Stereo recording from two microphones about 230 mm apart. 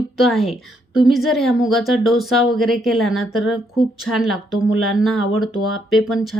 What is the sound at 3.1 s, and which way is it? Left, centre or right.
Speech, left.